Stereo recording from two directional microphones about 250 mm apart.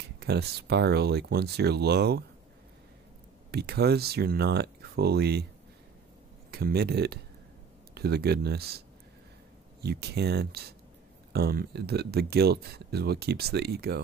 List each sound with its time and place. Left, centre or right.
0.0 s speech: right
3.5 s speech: right
6.5 s speech: right